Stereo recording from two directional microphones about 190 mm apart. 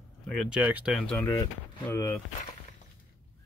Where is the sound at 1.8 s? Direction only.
15° left (ahead or behind).